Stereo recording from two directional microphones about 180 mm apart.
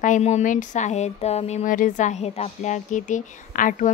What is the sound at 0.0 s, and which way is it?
Speech, 40° left (ahead or behind).